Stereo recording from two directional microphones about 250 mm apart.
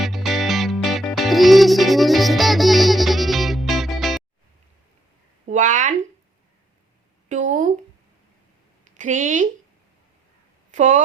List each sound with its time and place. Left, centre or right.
0.0 s music: centre
5.5 s a sound: right
7.3 s speech: right
9.0 s speech: right
10.7 s speech: right